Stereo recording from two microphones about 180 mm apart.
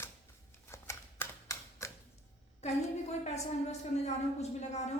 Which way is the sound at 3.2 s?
40° left (ahead or behind).